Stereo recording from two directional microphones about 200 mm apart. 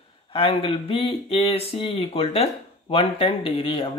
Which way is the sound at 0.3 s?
25° left (ahead or behind).